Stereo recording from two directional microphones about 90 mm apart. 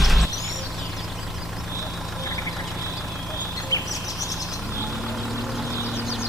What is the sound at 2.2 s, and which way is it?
Vehicle, 40° left (ahead or behind).